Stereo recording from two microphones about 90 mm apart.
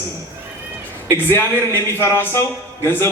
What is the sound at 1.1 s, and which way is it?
Speech, 25° left (ahead or behind).